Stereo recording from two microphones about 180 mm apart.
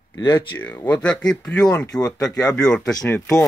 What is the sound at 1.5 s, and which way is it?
Speech, 20° left (ahead or behind).